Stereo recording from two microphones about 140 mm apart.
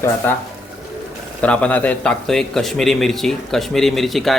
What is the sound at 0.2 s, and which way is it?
A man's voice, 15° left (ahead or behind).